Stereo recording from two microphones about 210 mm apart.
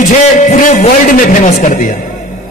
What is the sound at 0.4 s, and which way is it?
Speech, 35° left (ahead or behind).